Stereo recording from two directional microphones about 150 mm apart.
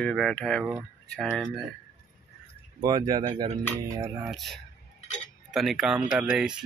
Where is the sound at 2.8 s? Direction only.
25° right (ahead or behind).